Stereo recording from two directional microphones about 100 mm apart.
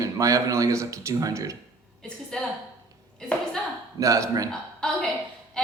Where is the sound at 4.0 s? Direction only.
30° right (ahead or behind).